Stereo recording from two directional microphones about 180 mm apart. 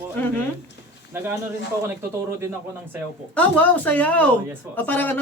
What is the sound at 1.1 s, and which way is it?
Speech, 15° right (ahead or behind).